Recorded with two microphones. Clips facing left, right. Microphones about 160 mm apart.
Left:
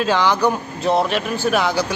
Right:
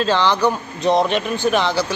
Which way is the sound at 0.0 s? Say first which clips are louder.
Even; 10° left (ahead or behind).